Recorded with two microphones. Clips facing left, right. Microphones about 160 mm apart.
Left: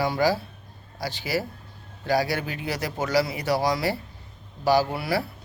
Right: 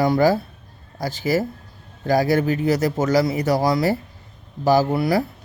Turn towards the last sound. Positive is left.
turn(degrees=-40)  # may be behind; listen again after turning